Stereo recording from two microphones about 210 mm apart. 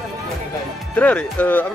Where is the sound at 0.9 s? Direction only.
5° left (ahead or behind).